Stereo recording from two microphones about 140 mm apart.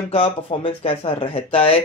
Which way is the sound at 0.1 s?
40° left (ahead or behind).